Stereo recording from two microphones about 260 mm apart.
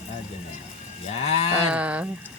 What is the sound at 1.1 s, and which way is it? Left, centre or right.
Livestock, left.